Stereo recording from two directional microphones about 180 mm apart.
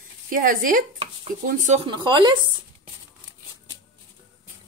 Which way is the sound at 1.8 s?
25° right (ahead or behind).